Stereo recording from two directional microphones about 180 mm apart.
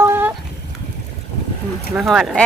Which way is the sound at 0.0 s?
10° right (ahead or behind).